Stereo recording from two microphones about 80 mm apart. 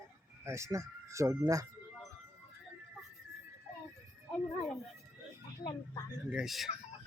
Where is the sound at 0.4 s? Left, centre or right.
Right.